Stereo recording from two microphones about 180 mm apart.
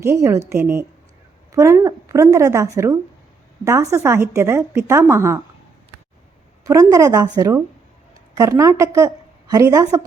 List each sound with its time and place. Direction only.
0.0 s a woman's voice: 15° right (ahead or behind)
6.7 s a woman's voice: 20° right (ahead or behind)